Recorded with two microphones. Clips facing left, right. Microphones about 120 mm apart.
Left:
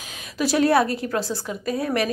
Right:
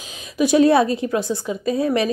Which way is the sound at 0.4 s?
20° right (ahead or behind).